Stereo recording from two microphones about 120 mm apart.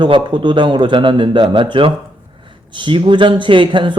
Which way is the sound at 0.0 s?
40° right (ahead or behind).